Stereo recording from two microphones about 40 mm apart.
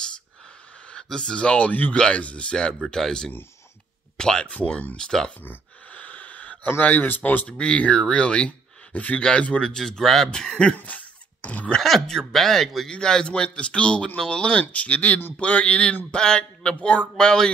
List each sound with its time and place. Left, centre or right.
1.0 s speech: centre
1.7 s speech: left
2.0 s speech: left
5.9 s wheeze: left
6.8 s speech: left
7.4 s speech: left
9.8 s speech: centre
10.3 s speech: left
10.8 s dog: left
12.1 s speech: centre
12.9 s speech: left